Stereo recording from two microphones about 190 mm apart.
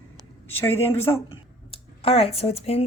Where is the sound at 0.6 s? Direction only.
10° left (ahead or behind).